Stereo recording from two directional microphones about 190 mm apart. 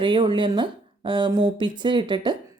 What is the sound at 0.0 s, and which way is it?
Speech, 25° right (ahead or behind).